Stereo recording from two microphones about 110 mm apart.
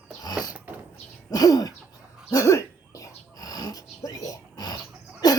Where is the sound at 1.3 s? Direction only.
35° left (ahead or behind).